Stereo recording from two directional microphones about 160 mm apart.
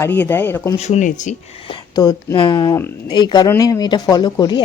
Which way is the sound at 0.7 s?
45° left (ahead or behind).